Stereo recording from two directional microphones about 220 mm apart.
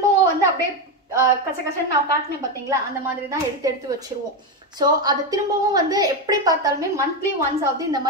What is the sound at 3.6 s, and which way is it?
A woman's voice, 15° right (ahead or behind).